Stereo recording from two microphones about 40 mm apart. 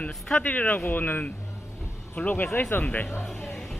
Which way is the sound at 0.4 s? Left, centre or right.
Left.